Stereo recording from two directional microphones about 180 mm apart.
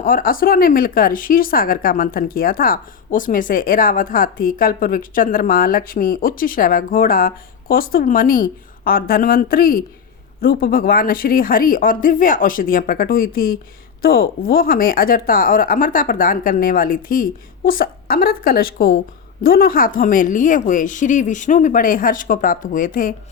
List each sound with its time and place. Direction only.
0.0 s a woman's voice: 50° left (ahead or behind)